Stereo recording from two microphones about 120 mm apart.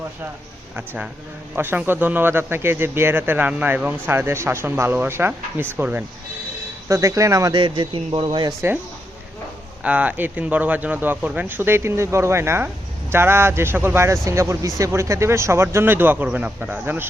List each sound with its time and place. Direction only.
1.5 s speech: 15° right (ahead or behind)
6.8 s speech: 25° right (ahead or behind)
7.5 s speech: 45° right (ahead or behind)
9.8 s speech: 10° right (ahead or behind)